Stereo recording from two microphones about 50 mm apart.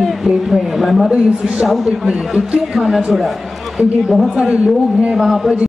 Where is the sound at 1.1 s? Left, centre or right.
Right.